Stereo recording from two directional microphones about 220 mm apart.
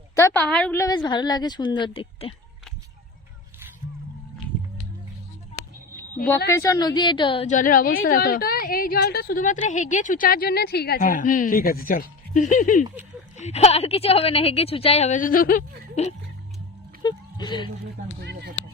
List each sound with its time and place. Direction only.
0.2 s a woman's voice: 10° left (ahead or behind)
6.5 s a woman's voice: 15° left (ahead or behind); by 16.1 s 35° left (ahead or behind)
17.0 s a sound: 20° left (ahead or behind)
18.2 s speech: 50° right (ahead or behind)